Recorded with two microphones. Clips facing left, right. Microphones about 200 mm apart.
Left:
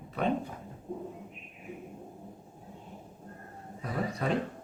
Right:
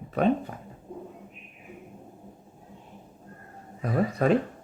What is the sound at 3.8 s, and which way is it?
Speech, 50° right (ahead or behind).